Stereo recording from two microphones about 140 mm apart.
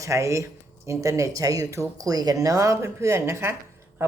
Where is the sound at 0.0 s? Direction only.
20° right (ahead or behind).